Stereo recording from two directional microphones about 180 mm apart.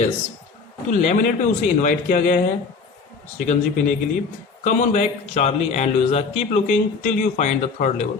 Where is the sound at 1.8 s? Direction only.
45° left (ahead or behind).